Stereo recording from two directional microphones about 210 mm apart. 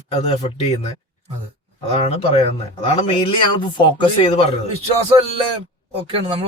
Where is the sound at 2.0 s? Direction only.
30° left (ahead or behind).